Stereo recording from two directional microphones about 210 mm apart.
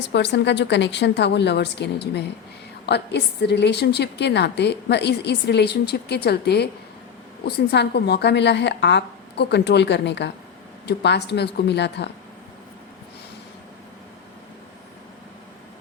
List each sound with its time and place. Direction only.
0.1 s a woman's voice: 55° left (ahead or behind)